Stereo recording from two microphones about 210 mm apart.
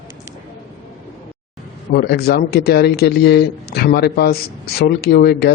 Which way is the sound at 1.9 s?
50° left (ahead or behind).